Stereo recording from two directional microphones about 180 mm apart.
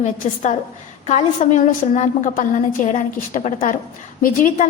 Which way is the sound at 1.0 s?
40° left (ahead or behind).